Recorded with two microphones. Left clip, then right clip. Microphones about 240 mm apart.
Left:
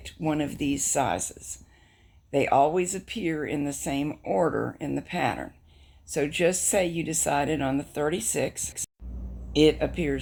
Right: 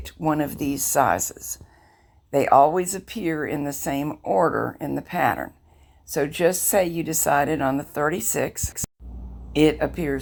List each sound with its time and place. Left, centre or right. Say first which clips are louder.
0.0 s speech: right 5 dB; centre
8.1 s speech: right 3 dB; right
9.6 s speech: right 2 dB; centre